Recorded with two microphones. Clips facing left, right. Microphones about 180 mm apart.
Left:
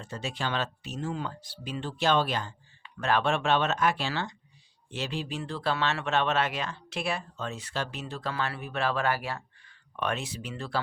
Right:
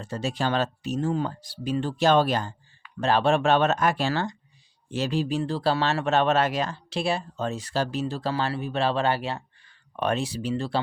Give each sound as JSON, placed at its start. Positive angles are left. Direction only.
{"t": 0.0, "sound": "speech", "side_deg": -40}
{"t": 3.0, "sound": "speech", "side_deg": -30}